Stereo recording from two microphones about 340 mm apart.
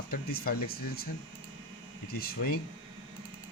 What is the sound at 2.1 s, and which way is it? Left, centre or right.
Speech, left.